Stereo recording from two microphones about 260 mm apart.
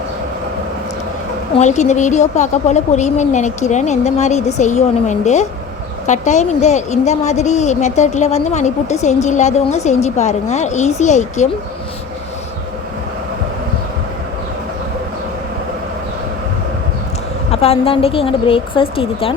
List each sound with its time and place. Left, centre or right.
1.5 s a woman's voice: left
17.5 s a woman's voice: left